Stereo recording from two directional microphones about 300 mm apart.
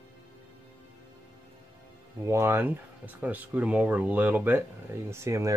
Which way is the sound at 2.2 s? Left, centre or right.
Centre.